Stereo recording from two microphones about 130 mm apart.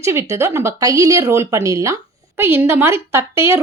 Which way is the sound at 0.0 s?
20° right (ahead or behind).